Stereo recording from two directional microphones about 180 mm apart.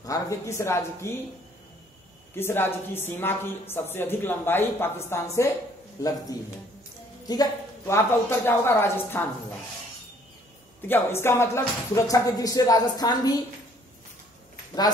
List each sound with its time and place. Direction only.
0.0 s speech: 15° left (ahead or behind)
2.3 s a woman's voice: 10° left (ahead or behind)
7.2 s a woman's voice: 20° left (ahead or behind)
10.8 s speech: 10° left (ahead or behind)